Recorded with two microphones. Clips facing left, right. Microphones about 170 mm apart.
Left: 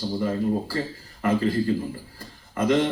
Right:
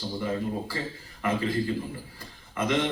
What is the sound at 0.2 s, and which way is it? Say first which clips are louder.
A man's voice: left 5 dB; 45° left (ahead or behind).